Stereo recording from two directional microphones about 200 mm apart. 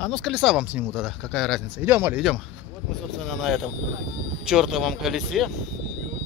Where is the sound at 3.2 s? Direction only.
Centre (ahead or behind).